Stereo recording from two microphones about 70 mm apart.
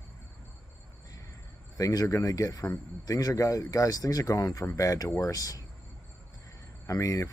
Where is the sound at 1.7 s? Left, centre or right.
Left.